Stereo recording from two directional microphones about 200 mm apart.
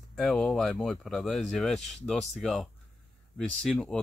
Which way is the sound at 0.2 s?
Centre (ahead or behind).